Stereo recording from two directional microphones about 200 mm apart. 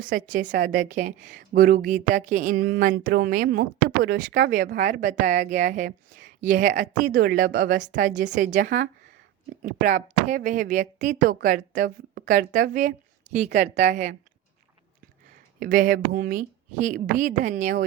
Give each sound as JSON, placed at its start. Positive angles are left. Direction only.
{"t": 0.0, "sound": "a woman's voice", "side_deg": -40}
{"t": 15.6, "sound": "speech", "side_deg": -45}